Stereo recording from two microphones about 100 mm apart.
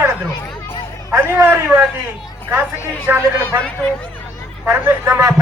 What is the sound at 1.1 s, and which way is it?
Speech, 20° right (ahead or behind).